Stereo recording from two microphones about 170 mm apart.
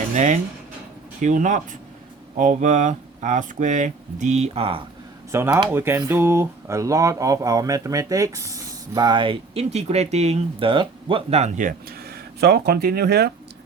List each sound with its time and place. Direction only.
0.1 s speech: 45° right (ahead or behind)
5.3 s speech: 20° right (ahead or behind); by 13.3 s 70° right (ahead or behind)